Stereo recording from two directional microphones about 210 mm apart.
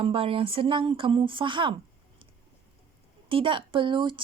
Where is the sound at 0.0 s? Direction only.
25° right (ahead or behind).